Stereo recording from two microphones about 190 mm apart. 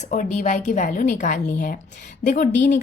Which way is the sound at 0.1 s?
40° left (ahead or behind).